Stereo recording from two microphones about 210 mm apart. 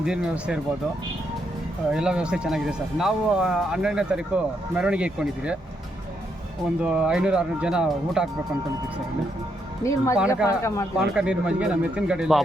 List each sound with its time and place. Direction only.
0.0 s speech: 5° right (ahead or behind)
1.9 s speech: 5° right (ahead or behind)
6.8 s speech: 5° right (ahead or behind)
9.8 s speech: 15° left (ahead or behind)
10.2 s speech: 5° right (ahead or behind)
10.4 s speech: 15° left (ahead or behind)
10.9 s speech: 5° right (ahead or behind)